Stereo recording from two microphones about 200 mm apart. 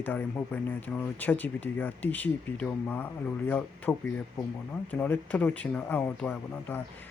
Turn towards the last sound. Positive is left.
turn(degrees=10)  # may be behind; listen again after turning